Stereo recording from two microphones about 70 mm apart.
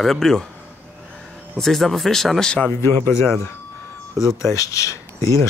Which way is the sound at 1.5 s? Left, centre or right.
Centre.